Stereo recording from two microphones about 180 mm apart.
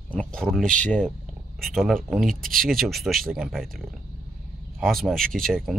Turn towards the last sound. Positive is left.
turn(degrees=0)  # may be behind; listen again after turning